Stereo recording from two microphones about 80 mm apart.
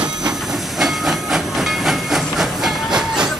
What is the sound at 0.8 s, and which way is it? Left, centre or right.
Train, centre.